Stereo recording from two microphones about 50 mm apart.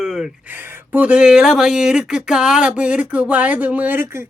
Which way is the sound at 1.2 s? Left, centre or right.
Centre.